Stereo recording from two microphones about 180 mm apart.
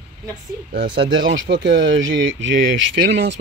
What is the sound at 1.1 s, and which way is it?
Speech, 90° right.